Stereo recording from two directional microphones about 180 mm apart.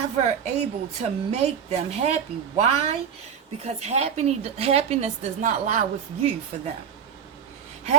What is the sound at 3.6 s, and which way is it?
A woman's voice, 35° right (ahead or behind).